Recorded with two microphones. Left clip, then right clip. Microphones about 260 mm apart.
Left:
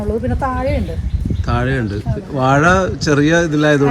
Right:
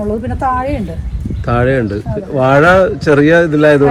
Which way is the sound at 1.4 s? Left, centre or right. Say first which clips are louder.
Right 7 dB; centre.